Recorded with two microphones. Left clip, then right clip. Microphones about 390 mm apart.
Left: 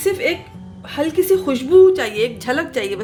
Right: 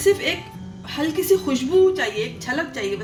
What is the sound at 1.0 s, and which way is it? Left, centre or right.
A woman's voice, left.